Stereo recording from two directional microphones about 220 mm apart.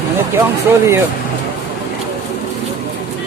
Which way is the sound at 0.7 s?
10° right (ahead or behind).